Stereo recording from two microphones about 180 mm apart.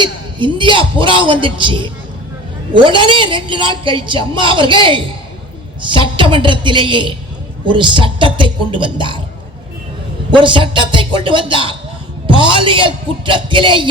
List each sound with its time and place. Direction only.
0.0 s a man's voice: 25° right (ahead or behind)
10.3 s a man's voice: 30° right (ahead or behind)